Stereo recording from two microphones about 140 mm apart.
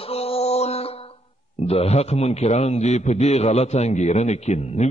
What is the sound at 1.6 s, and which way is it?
A man's voice, 50° left (ahead or behind).